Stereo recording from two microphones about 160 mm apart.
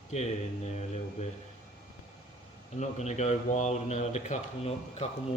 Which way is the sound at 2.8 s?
45° left (ahead or behind).